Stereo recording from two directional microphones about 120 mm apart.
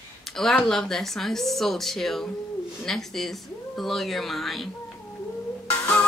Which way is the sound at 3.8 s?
Centre (ahead or behind).